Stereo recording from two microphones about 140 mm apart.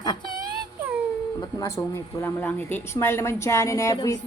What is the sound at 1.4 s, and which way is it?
A woman's voice, 20° left (ahead or behind).